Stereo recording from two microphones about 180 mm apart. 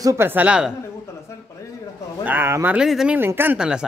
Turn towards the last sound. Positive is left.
turn(degrees=-5)  # may be behind; listen again after turning